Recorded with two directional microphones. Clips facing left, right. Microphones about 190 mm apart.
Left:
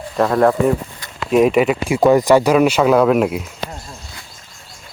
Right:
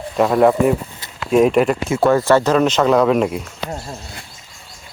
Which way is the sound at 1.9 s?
15° left (ahead or behind).